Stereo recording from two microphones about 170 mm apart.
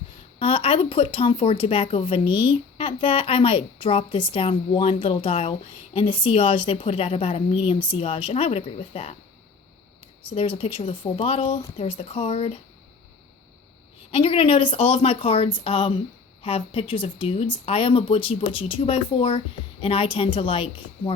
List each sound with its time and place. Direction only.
0.3 s speech: 35° left (ahead or behind)
10.3 s speech: 35° left (ahead or behind)
14.1 s speech: 35° left (ahead or behind)